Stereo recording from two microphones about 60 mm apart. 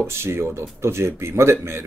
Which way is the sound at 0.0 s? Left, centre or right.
Right.